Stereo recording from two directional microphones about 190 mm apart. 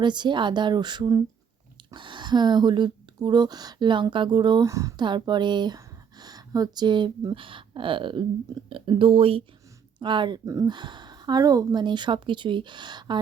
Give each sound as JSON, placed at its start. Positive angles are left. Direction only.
{"t": 0.0, "sound": "speech", "side_deg": -25}